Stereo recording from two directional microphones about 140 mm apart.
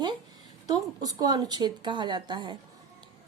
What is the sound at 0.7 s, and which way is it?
Speech, 30° right (ahead or behind).